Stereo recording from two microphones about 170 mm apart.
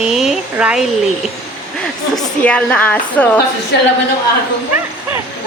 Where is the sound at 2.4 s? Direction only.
5° left (ahead or behind).